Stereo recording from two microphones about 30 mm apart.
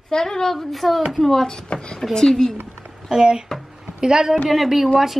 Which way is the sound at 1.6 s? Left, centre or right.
Left.